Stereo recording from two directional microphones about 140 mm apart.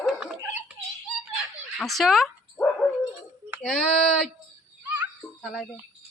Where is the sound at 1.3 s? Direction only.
Centre (ahead or behind).